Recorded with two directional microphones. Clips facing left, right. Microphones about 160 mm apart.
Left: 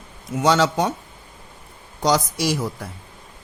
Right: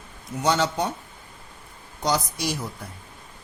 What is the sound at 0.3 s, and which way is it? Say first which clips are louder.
Speech: left 5 dB; 90° left.